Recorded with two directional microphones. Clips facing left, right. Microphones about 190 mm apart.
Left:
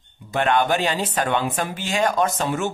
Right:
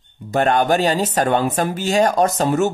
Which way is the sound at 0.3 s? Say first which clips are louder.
Right 4 dB; 40° right (ahead or behind).